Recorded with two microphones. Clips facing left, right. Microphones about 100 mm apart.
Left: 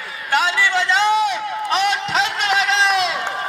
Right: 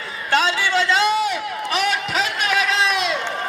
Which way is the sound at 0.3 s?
20° left (ahead or behind).